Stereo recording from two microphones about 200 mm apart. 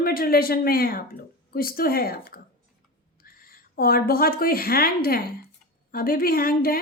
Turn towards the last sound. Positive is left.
turn(degrees=45)  # may be behind; listen again after turning